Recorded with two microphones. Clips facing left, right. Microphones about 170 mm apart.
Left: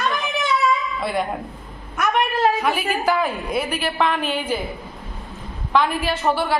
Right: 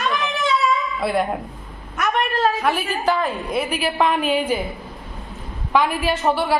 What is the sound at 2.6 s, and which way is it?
A woman's voice, 5° left (ahead or behind).